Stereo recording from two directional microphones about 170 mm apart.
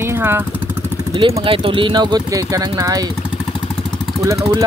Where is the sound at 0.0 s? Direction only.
15° right (ahead or behind).